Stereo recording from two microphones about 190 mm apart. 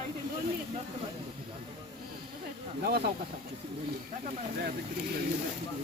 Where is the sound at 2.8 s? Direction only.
60° right (ahead or behind).